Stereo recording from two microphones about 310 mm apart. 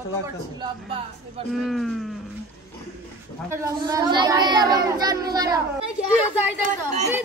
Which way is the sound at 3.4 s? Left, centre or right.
Centre.